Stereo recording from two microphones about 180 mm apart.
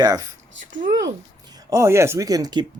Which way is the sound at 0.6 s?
45° right (ahead or behind).